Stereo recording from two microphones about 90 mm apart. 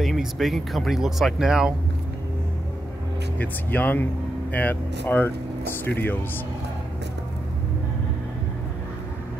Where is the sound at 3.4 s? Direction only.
20° left (ahead or behind).